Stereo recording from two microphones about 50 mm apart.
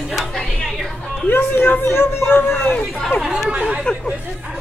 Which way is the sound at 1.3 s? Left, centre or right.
Left.